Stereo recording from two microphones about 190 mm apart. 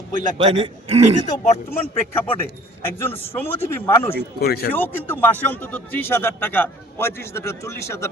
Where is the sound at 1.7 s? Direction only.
30° left (ahead or behind).